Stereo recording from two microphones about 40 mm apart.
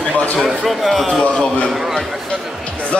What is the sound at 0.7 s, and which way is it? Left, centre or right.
Speech, centre.